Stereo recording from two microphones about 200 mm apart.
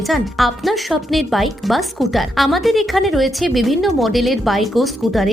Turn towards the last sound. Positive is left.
turn(degrees=0)  # may be behind; listen again after turning